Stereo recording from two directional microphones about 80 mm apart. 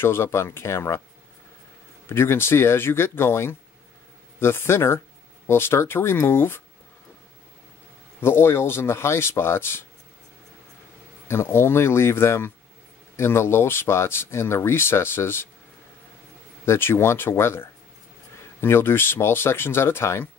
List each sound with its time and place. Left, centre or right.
0.0 s speech: left
2.0 s speech: left
8.2 s speech: left
11.2 s speech: left
16.6 s speech: left